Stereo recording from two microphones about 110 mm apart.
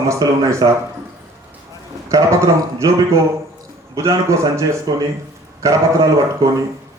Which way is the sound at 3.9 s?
30° right (ahead or behind).